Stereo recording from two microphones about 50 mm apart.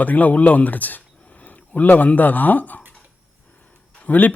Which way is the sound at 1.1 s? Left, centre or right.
Left.